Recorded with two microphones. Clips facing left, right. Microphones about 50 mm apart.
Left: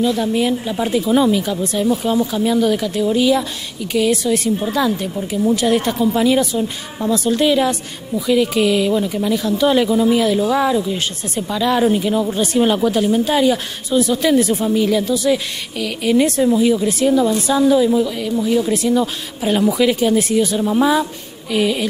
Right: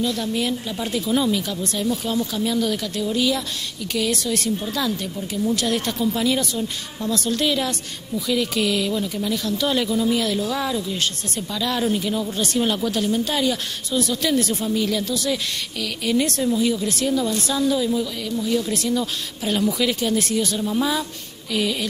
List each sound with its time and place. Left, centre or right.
0.0 s speech: centre